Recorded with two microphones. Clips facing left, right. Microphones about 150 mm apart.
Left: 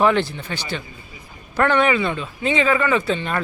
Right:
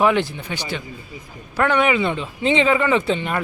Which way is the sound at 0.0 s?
15° right (ahead or behind).